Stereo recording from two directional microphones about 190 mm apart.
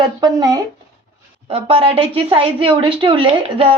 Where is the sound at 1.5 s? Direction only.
30° right (ahead or behind).